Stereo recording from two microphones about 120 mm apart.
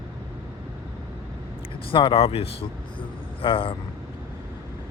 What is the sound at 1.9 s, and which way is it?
A man's voice, 45° left (ahead or behind).